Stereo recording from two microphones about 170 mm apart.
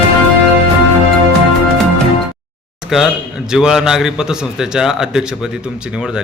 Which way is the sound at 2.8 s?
Centre (ahead or behind).